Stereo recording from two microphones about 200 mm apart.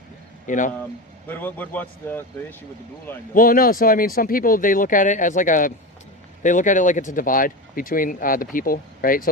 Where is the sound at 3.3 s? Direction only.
45° left (ahead or behind).